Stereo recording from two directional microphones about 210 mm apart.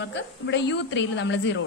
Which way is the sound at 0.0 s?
55° left (ahead or behind).